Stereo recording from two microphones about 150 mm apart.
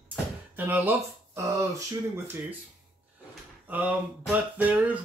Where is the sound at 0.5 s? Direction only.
10° right (ahead or behind).